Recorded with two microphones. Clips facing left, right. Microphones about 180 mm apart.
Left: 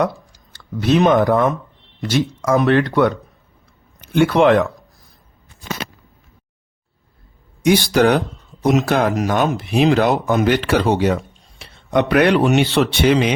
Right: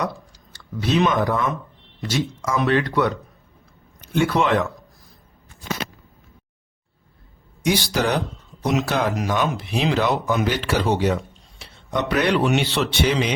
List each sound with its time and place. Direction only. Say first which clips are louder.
0.5 s speech: left 5 dB; 55° left (ahead or behind)
4.1 s speech: left 7 dB; 65° left (ahead or behind)
7.6 s speech: left 7 dB; 55° left (ahead or behind)